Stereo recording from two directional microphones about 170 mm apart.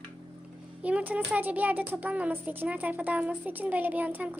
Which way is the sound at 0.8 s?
10° right (ahead or behind).